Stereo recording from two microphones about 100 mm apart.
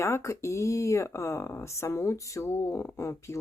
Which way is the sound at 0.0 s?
30° left (ahead or behind).